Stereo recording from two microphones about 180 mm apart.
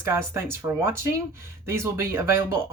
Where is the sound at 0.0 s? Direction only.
15° right (ahead or behind).